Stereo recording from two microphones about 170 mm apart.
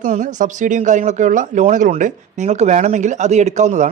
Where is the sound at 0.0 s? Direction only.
50° right (ahead or behind).